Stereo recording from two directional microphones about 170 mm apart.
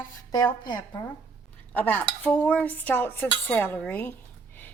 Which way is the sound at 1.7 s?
10° left (ahead or behind).